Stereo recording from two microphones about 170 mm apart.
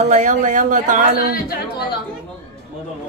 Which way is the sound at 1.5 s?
70° left (ahead or behind).